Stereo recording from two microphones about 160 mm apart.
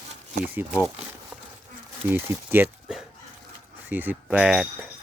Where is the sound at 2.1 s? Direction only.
15° right (ahead or behind).